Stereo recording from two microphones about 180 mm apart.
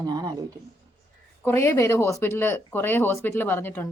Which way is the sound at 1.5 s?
15° left (ahead or behind).